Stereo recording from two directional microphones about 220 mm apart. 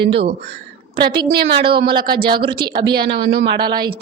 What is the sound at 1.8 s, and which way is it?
Speech, 20° right (ahead or behind).